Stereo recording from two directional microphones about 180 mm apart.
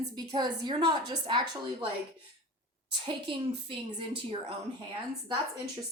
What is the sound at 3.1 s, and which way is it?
Speech, 25° right (ahead or behind).